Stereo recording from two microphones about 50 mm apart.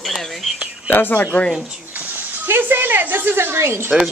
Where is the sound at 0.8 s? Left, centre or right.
Left.